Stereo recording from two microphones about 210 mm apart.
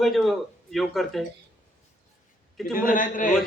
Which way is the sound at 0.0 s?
Centre (ahead or behind).